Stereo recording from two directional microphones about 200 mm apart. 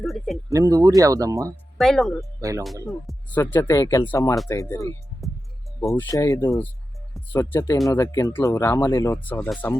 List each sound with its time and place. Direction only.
0.0 s a sound: centre (ahead or behind)
0.5 s speech: 20° right (ahead or behind)
1.8 s speech: centre (ahead or behind)
2.4 s speech: 15° right (ahead or behind)
3.1 s speech: 10° left (ahead or behind)